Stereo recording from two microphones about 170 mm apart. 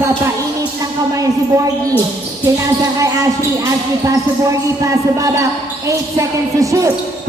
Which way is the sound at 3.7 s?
15° right (ahead or behind).